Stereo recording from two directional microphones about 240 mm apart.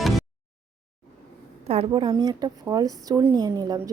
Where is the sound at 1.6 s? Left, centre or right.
Right.